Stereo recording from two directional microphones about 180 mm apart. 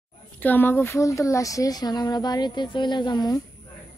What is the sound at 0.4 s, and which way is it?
Speech, 10° left (ahead or behind).